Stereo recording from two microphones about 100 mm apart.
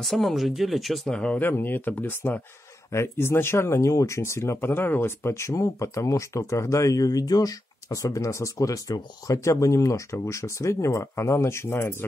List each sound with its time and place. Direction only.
0.0 s speech: centre (ahead or behind); by 12.0 s 25° left (ahead or behind)